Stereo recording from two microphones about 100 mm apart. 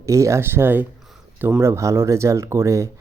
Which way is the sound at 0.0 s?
30° right (ahead or behind).